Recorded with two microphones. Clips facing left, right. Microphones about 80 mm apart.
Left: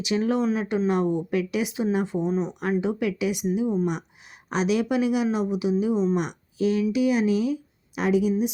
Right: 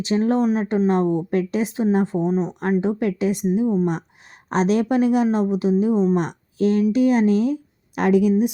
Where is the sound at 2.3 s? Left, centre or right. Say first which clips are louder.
Right 4 dB; right.